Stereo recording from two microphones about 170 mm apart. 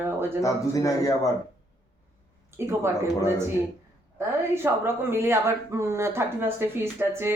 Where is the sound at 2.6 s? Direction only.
15° right (ahead or behind).